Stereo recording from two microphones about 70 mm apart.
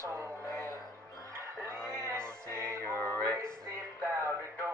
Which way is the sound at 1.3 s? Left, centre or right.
Right.